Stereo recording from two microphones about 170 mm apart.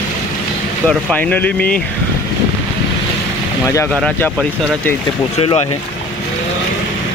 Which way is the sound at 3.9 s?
5° left (ahead or behind).